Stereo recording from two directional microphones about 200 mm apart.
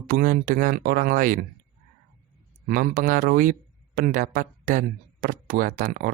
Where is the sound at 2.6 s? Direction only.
45° right (ahead or behind).